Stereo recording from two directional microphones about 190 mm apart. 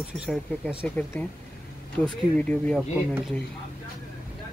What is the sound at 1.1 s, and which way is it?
Speech, 5° left (ahead or behind).